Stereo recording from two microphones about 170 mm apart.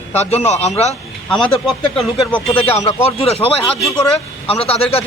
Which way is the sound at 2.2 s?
10° left (ahead or behind).